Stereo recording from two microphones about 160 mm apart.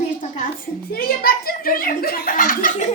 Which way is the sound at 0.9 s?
70° left (ahead or behind).